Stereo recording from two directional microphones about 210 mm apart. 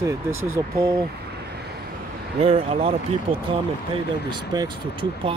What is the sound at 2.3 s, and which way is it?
Speech, 25° right (ahead or behind).